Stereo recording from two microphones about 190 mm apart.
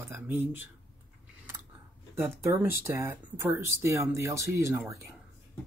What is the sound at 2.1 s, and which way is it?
Speech, 15° right (ahead or behind).